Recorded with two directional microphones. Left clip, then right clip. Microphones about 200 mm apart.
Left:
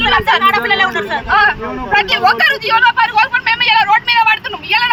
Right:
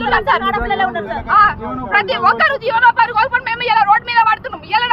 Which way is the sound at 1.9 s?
15° right (ahead or behind).